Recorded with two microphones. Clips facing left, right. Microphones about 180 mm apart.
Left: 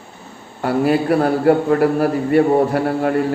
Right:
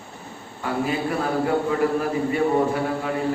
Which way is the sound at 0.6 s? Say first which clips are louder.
Left 8 dB; 65° left (ahead or behind).